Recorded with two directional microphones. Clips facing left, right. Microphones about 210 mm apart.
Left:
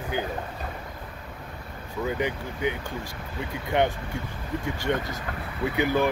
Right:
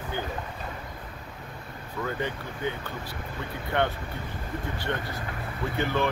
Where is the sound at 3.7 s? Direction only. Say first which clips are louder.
Left 3 dB; 20° left (ahead or behind).